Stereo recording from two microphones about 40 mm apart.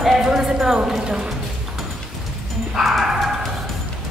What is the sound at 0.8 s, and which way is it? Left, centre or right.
Speech, centre.